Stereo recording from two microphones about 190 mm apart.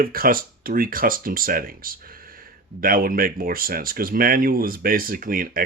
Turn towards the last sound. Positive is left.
turn(degrees=-50)  # may be behind; listen again after turning